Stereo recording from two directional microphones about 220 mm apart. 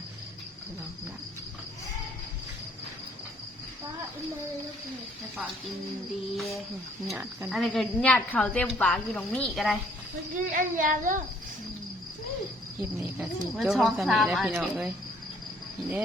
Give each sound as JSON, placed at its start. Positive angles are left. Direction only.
{"t": 6.3, "sound": "a woman's voice", "side_deg": 0}
{"t": 10.3, "sound": "speech", "side_deg": -35}
{"t": 13.0, "sound": "a woman's voice", "side_deg": -5}